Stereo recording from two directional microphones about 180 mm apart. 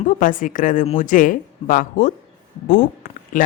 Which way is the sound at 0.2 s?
45° left (ahead or behind).